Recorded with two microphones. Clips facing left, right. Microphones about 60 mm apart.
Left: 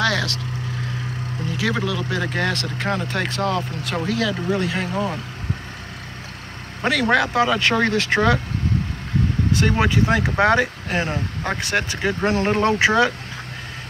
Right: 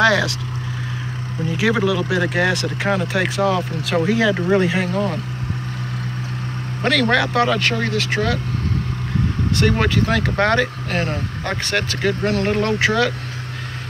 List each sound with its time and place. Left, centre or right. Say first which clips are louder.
0.0 s vehicle: right 6 dB; centre
1.7 s speech: right 6 dB; centre
4.0 s speech: right 5 dB; right
4.7 s speech: right 3 dB; centre
6.8 s speech: right 1 dB; centre
7.7 s speech: left 2 dB; left
9.6 s speech: right 2 dB; centre